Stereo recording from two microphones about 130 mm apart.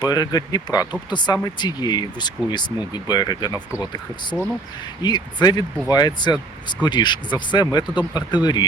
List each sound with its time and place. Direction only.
0.0 s speech: 30° left (ahead or behind)
5.0 s speech: 35° left (ahead or behind)